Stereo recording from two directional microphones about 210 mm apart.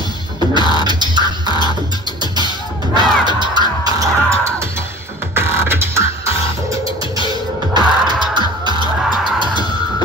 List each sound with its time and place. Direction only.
0.8 s music: 20° right (ahead or behind)
1.5 s music: 20° left (ahead or behind)
2.3 s music: 20° right (ahead or behind)
7.2 s music: 20° right (ahead or behind)